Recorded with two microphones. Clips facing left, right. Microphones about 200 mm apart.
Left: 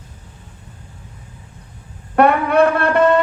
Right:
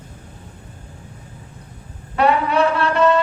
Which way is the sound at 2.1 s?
55° left (ahead or behind).